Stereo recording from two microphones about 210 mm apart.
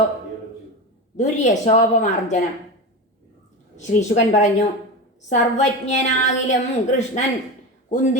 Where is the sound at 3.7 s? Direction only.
35° left (ahead or behind).